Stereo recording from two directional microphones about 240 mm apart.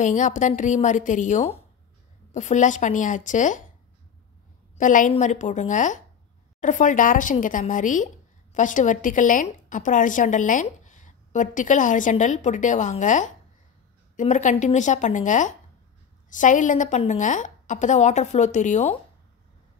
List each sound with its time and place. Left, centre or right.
0.0 s a woman's voice: left
4.7 s a woman's voice: left